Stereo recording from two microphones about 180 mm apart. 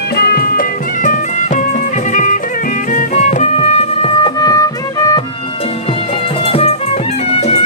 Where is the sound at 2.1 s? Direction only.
45° left (ahead or behind); by 5.2 s 20° left (ahead or behind).